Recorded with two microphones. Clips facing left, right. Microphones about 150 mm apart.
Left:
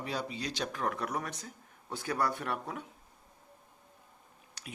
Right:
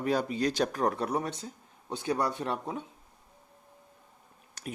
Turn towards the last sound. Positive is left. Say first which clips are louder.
# right 8 dB
turn(degrees=-45)  # may be behind; listen again after turning